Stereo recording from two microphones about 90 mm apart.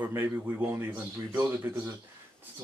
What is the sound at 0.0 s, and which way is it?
A man's voice, 20° right (ahead or behind).